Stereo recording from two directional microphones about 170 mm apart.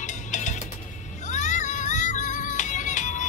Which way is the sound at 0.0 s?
45° left (ahead or behind).